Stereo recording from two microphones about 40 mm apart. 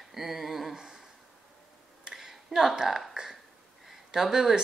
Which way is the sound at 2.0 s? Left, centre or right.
Centre.